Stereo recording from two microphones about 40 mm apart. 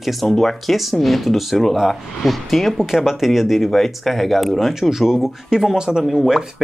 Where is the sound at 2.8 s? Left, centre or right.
Centre.